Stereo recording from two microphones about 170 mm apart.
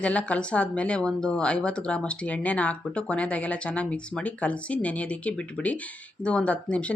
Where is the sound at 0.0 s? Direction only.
5° left (ahead or behind).